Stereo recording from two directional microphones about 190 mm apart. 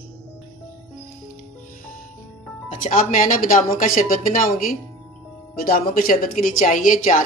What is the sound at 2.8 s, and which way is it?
A woman's voice, 45° left (ahead or behind).